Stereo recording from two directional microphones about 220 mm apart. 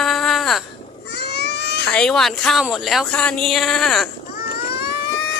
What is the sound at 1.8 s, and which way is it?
Speech, 5° left (ahead or behind).